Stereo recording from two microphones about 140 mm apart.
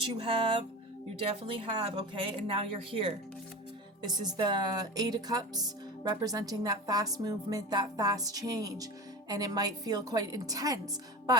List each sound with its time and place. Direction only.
0.0 s speech: 40° right (ahead or behind)
4.0 s speech: 30° right (ahead or behind)